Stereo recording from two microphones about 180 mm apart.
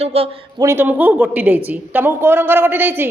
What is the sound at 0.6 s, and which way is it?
A woman's voice, 10° right (ahead or behind).